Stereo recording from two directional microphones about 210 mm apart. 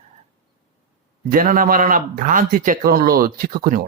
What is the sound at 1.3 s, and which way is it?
Mantra, 40° right (ahead or behind).